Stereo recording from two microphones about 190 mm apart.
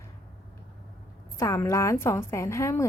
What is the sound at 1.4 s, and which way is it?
A woman's voice, 15° left (ahead or behind).